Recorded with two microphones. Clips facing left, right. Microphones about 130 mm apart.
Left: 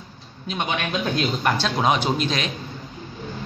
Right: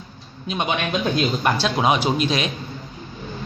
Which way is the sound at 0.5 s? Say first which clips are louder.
Right 3 dB; 15° right (ahead or behind).